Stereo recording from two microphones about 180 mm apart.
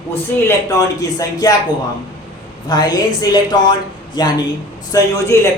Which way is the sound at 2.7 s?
20° left (ahead or behind).